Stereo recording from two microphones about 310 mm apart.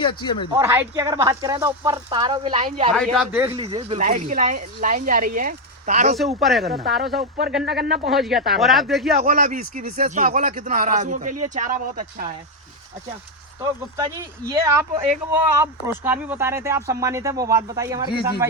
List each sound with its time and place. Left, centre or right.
0.0 s speech: centre
0.6 s speech: centre
2.9 s speech: centre
3.6 s speech: centre
6.1 s speech: centre
7.6 s a man's voice: right
8.1 s speech: centre
9.2 s speech: right
13.6 s speech: centre